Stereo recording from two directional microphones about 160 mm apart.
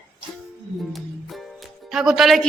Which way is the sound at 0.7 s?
Centre (ahead or behind).